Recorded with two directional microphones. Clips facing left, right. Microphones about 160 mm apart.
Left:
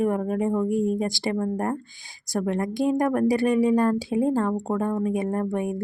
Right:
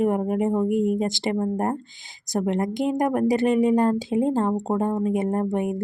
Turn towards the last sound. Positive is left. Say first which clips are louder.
# right 2 dB
turn(degrees=-20)  # may be behind; listen again after turning